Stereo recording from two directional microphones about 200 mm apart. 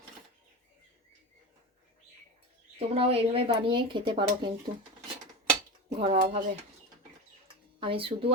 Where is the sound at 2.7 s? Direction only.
30° right (ahead or behind).